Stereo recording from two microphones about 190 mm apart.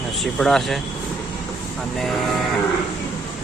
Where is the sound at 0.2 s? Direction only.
Centre (ahead or behind).